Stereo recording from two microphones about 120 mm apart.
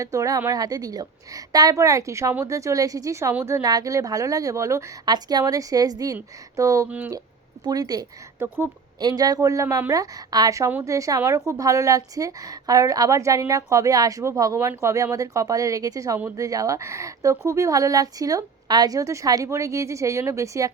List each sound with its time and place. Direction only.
0.0 s a woman's voice: 30° right (ahead or behind)
6.8 s speech: 10° right (ahead or behind)
7.6 s speech: 35° right (ahead or behind)
8.4 s a woman's voice: 20° right (ahead or behind)
9.0 s a woman's voice: 35° right (ahead or behind)